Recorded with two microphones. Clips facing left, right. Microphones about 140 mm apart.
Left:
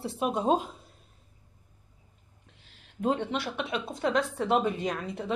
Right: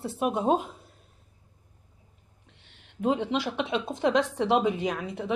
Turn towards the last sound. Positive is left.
turn(degrees=-10)  # may be behind; listen again after turning